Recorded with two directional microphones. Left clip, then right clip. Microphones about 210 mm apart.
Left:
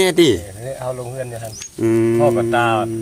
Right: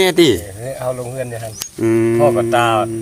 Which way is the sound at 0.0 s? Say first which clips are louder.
Right 2 dB; 5° left (ahead or behind).